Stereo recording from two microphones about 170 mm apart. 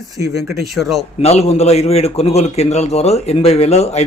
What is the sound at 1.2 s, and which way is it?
Speech, 40° left (ahead or behind).